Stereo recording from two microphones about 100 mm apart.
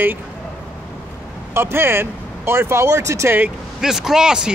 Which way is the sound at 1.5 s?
25° right (ahead or behind).